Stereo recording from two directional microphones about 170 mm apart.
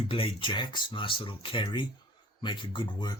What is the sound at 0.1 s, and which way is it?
Speech, 30° left (ahead or behind).